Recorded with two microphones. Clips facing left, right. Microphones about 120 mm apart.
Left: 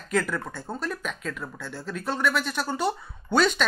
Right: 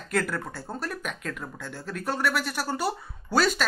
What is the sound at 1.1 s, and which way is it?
Speech, 55° right (ahead or behind).